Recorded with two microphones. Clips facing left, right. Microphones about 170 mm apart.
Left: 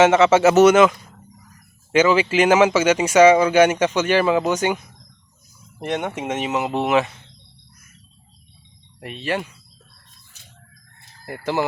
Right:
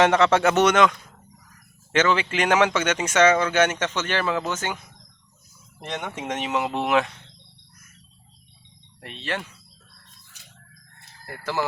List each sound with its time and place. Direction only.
0.0 s speech: 5° left (ahead or behind)
5.8 s speech: 15° left (ahead or behind)
9.0 s speech: 10° left (ahead or behind)
11.3 s speech: 20° left (ahead or behind)